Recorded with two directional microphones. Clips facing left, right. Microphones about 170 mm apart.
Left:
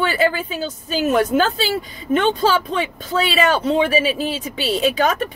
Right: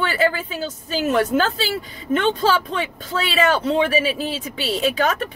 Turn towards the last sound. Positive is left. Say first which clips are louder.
# left 2 dB
turn(degrees=15)  # may be behind; listen again after turning